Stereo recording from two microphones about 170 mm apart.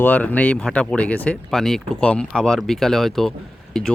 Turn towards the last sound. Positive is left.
turn(degrees=0)  # may be behind; listen again after turning